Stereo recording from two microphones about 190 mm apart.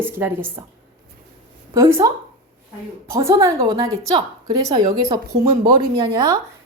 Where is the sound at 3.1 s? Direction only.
15° right (ahead or behind).